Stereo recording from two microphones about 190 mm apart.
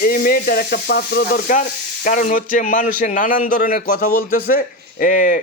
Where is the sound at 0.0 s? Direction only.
50° left (ahead or behind).